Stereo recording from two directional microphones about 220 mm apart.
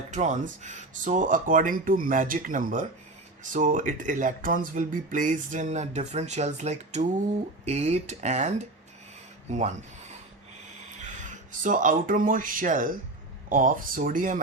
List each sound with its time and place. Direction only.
0.1 s speech: 35° right (ahead or behind)
11.6 s speech: 35° right (ahead or behind)